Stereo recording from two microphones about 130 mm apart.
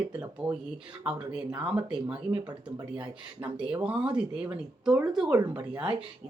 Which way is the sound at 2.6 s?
10° right (ahead or behind).